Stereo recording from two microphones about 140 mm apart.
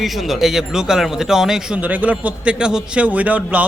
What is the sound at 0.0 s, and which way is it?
Speech, centre (ahead or behind).